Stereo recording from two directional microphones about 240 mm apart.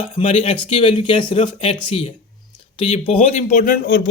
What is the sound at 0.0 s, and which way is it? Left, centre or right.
Speech, left.